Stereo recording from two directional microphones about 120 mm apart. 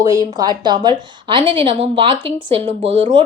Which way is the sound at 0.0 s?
30° right (ahead or behind).